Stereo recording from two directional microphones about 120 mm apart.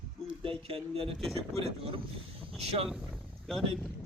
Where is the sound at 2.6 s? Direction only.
55° right (ahead or behind).